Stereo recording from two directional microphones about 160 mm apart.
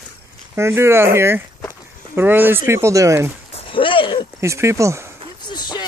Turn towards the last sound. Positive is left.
turn(degrees=25)  # may be behind; listen again after turning